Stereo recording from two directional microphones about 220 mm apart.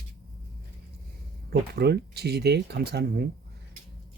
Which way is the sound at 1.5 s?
45° right (ahead or behind).